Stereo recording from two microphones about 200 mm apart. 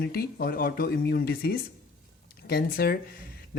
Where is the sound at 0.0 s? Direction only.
50° left (ahead or behind).